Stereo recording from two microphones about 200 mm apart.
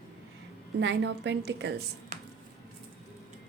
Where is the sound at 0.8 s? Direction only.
60° right (ahead or behind).